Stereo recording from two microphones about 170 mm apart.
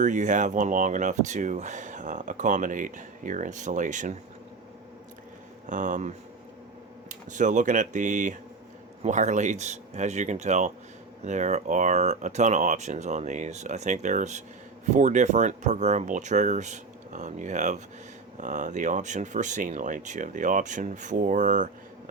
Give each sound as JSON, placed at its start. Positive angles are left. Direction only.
{"t": 0.0, "sound": "speech", "side_deg": -45}
{"t": 5.6, "sound": "speech", "side_deg": -45}